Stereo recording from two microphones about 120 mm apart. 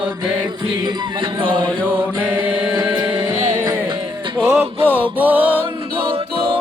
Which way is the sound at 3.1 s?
35° right (ahead or behind).